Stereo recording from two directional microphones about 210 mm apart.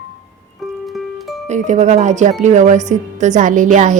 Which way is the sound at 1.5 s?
35° right (ahead or behind).